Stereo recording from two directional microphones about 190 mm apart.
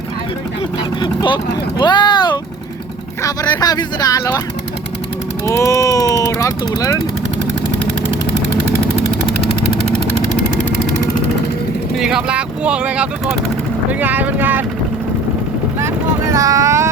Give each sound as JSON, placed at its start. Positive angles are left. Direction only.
{"t": 1.0, "sound": "speech", "side_deg": 25}
{"t": 1.8, "sound": "vehicle", "side_deg": 25}
{"t": 3.2, "sound": "speech", "side_deg": 20}
{"t": 5.5, "sound": "speech", "side_deg": 15}
{"t": 11.9, "sound": "speech", "side_deg": -5}
{"t": 15.8, "sound": "vehicle", "side_deg": -15}